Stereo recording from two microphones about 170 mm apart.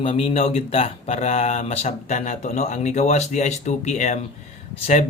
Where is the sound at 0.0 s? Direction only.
35° left (ahead or behind).